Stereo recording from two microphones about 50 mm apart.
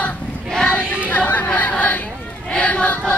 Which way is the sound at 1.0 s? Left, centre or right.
Left.